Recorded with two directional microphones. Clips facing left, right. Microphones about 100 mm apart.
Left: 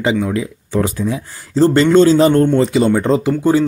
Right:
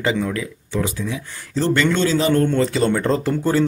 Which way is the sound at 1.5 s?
30° left (ahead or behind).